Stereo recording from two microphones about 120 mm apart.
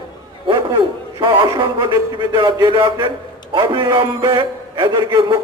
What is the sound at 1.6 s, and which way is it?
A man's voice, 40° right (ahead or behind).